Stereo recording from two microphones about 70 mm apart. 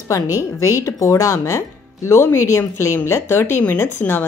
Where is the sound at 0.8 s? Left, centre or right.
Left.